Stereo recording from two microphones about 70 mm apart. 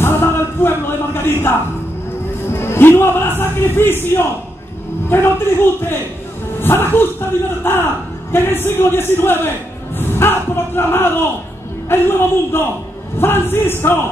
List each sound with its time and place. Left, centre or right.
0.0 s music: left
2.5 s speech: left